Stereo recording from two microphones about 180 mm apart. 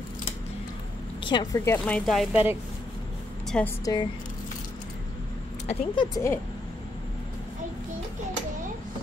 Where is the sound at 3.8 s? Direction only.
20° left (ahead or behind).